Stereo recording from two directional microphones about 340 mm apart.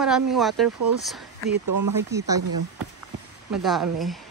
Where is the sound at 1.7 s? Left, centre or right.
Right.